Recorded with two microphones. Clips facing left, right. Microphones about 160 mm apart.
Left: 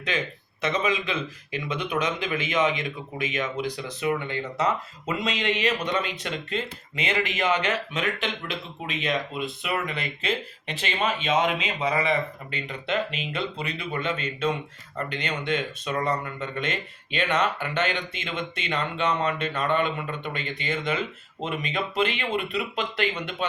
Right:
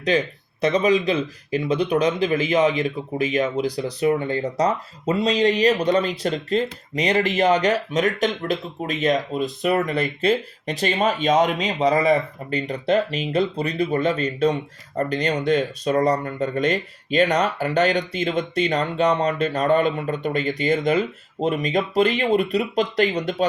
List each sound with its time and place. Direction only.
0.0 s speech: 35° right (ahead or behind)